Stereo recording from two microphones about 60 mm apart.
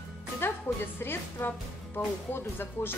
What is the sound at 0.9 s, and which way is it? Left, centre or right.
Speech, left.